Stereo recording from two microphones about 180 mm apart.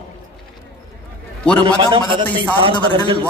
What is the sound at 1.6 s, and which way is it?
A man's voice, 25° right (ahead or behind).